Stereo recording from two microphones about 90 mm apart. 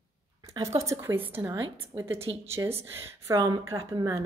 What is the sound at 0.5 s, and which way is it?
A woman's voice, 35° right (ahead or behind).